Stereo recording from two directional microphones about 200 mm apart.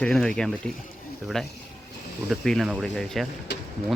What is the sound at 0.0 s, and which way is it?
Speech, 5° left (ahead or behind).